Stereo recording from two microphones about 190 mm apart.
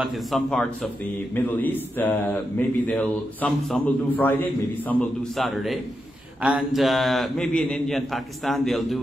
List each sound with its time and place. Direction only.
0.0 s a man's voice: centre (ahead or behind)
6.4 s a man's voice: 5° right (ahead or behind)